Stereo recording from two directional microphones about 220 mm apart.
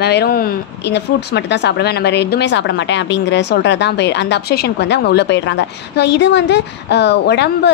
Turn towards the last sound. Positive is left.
turn(degrees=50)  # may be behind; listen again after turning